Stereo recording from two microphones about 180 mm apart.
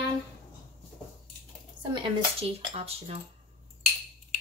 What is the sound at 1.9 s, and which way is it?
Speech, 30° right (ahead or behind).